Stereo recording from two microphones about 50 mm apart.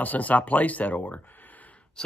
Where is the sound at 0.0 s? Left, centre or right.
Left.